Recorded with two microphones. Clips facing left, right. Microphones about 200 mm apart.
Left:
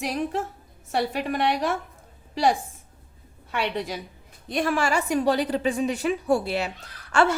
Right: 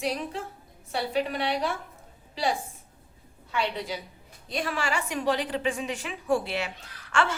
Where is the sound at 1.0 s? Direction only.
50° left (ahead or behind).